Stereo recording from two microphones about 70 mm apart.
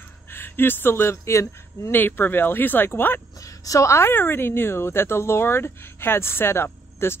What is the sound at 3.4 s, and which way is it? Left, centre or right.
Speech, left.